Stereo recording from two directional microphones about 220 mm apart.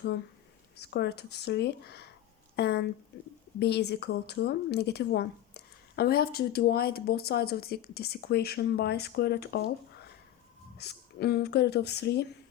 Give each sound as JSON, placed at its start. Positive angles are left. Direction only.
{"t": 0.8, "sound": "speech", "side_deg": 50}
{"t": 10.8, "sound": "speech", "side_deg": 45}